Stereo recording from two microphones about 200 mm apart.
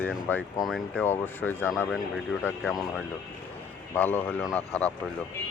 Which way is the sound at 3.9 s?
10° left (ahead or behind).